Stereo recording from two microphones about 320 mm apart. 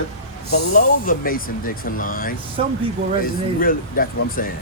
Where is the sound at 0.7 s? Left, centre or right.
Left.